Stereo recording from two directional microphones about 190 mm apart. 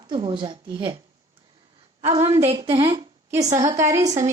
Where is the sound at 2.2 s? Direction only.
35° right (ahead or behind).